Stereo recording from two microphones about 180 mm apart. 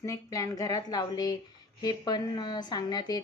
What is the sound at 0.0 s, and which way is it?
Speech, 20° left (ahead or behind).